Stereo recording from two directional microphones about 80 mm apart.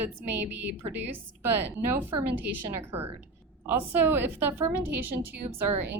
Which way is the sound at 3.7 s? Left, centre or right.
Right.